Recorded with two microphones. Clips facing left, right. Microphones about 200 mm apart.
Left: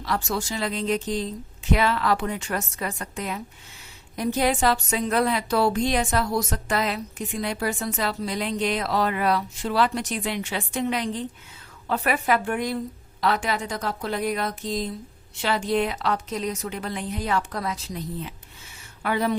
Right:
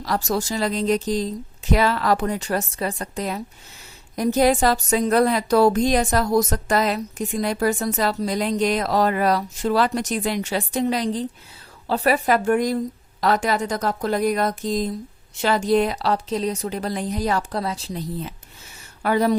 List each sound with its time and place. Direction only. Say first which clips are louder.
0.0 s a woman's voice: right 4 dB; 40° right (ahead or behind)